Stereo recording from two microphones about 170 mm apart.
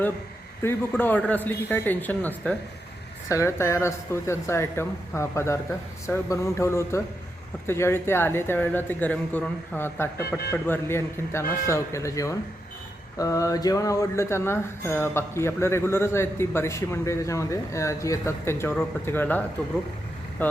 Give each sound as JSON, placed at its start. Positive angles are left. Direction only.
{"t": 0.6, "sound": "speech", "side_deg": 10}